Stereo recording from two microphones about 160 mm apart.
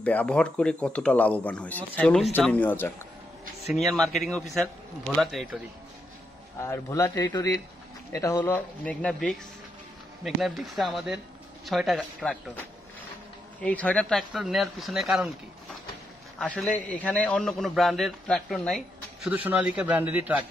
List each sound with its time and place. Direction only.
0.0 s a man's voice: 10° left (ahead or behind)
6.6 s a man's voice: 20° left (ahead or behind); by 15.3 s centre (ahead or behind)
16.3 s a man's voice: centre (ahead or behind)
19.2 s a man's voice: 5° right (ahead or behind)